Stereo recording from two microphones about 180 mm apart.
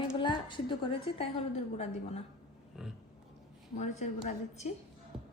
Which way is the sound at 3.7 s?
40° left (ahead or behind).